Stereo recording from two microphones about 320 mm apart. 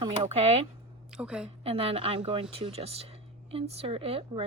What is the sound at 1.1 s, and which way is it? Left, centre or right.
Speech, centre.